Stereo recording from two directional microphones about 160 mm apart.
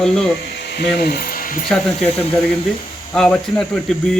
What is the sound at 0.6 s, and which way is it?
Speech, 90° left.